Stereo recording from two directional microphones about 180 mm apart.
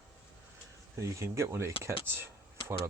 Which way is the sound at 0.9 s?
15° right (ahead or behind).